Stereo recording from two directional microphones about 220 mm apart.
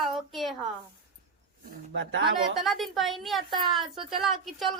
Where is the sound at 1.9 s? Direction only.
55° right (ahead or behind).